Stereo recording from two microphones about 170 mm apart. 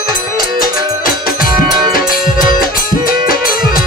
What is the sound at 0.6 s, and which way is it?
Music, 25° right (ahead or behind).